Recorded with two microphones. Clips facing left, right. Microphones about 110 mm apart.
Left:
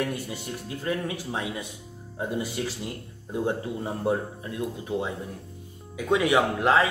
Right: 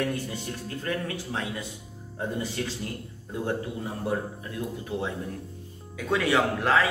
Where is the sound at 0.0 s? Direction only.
15° left (ahead or behind).